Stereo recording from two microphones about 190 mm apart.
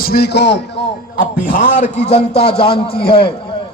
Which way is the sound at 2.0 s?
35° left (ahead or behind).